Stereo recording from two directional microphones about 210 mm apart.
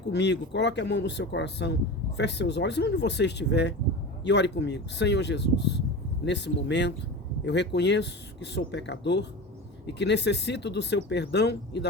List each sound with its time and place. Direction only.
0.1 s speech: 55° left (ahead or behind)